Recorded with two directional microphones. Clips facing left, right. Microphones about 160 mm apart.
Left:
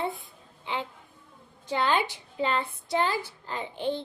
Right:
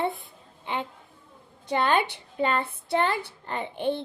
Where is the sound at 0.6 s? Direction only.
55° right (ahead or behind).